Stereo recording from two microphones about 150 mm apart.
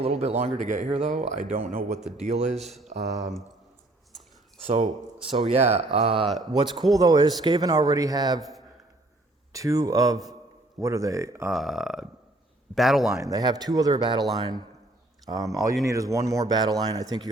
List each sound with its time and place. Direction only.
0.0 s speech: 45° right (ahead or behind)
4.6 s speech: 50° right (ahead or behind)
6.4 s speech: 30° right (ahead or behind)
9.5 s speech: 20° right (ahead or behind)
11.5 s speech: centre (ahead or behind)
13.2 s speech: 25° right (ahead or behind)
15.3 s speech: 25° right (ahead or behind)